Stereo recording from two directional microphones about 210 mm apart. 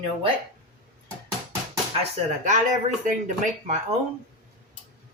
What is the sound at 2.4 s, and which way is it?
Speech, 35° right (ahead or behind).